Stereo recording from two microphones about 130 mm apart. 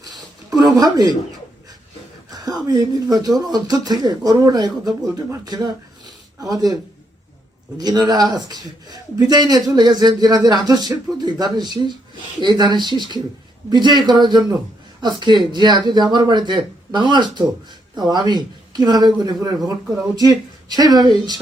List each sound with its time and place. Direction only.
0.5 s speech: 30° right (ahead or behind)
2.3 s speech: 30° right (ahead or behind)
7.8 s a man's voice: 30° right (ahead or behind)
20.7 s a man's voice: 30° right (ahead or behind)